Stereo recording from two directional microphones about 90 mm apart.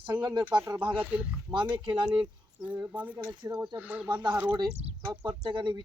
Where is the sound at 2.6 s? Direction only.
15° right (ahead or behind).